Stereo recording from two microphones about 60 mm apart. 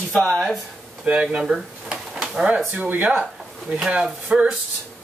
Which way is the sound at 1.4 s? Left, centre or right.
Centre.